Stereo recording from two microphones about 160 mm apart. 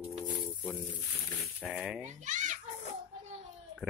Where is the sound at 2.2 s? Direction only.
50° right (ahead or behind).